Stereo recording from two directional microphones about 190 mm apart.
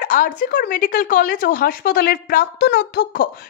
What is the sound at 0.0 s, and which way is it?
A woman's voice, 45° left (ahead or behind).